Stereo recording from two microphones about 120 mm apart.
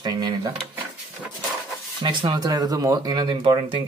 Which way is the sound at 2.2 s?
35° right (ahead or behind).